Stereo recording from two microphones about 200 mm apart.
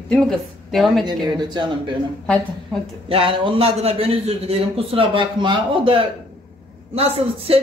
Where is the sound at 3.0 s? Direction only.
25° right (ahead or behind).